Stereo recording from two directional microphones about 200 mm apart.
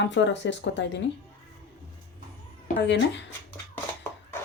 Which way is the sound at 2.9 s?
60° left (ahead or behind).